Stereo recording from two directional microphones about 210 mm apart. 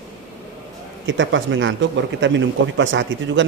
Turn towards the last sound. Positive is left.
turn(degrees=-60)  # may be behind; listen again after turning